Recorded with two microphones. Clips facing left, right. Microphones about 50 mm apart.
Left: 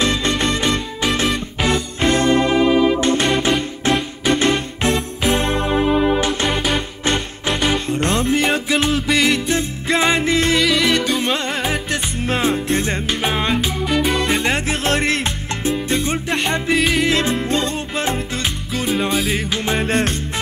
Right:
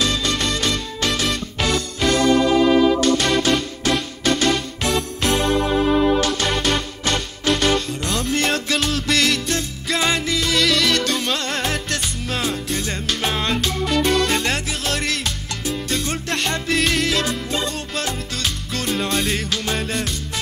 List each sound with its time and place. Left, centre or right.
0.0 s music: left
7.9 s music: left
8.4 s music: centre; by 10.6 s left
10.6 s music: centre
12.2 s music: left
13.2 s music: centre
14.7 s music: left; by 17.1 s centre
17.1 s music: left; by 19.4 s centre
19.5 s music: left
19.9 s music: left